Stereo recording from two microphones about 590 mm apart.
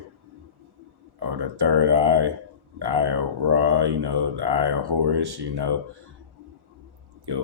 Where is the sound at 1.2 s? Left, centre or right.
Right.